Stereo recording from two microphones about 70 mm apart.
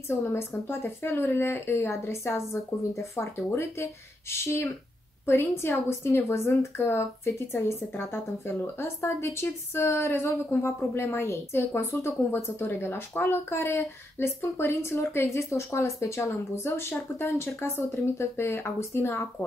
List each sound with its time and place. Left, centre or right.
0.1 s a woman's voice: left